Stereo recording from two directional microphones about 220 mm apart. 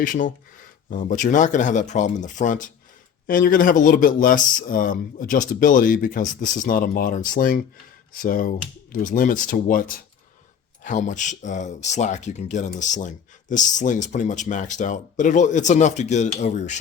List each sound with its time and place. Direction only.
0.0 s speech: 35° left (ahead or behind)
10.8 s speech: 35° left (ahead or behind)